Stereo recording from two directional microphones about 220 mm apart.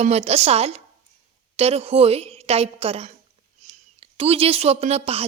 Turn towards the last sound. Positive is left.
turn(degrees=-25)  # may be behind; listen again after turning